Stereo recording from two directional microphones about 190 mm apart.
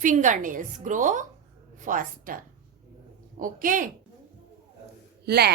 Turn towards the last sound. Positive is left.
turn(degrees=-55)  # may be behind; listen again after turning